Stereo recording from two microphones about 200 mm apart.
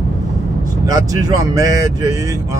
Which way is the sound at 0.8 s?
15° right (ahead or behind).